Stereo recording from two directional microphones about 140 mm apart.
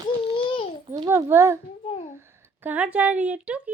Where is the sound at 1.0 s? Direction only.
20° right (ahead or behind).